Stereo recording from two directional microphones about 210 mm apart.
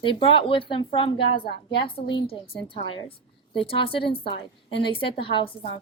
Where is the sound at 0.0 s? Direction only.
25° left (ahead or behind).